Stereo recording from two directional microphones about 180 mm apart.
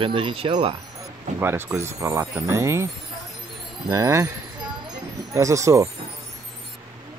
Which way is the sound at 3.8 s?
20° right (ahead or behind).